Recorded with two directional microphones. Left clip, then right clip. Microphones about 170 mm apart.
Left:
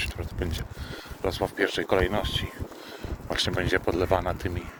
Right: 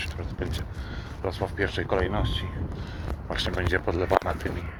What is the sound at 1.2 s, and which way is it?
Speech, 70° left (ahead or behind).